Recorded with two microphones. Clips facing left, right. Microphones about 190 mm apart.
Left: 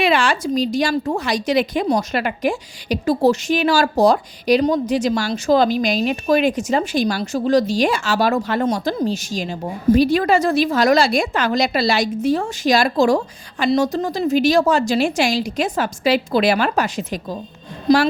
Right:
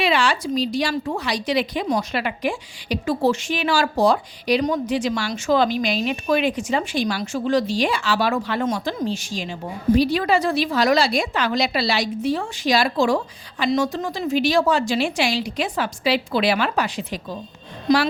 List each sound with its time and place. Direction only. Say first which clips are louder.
0.0 s a woman's voice: left 3 dB; 50° left (ahead or behind)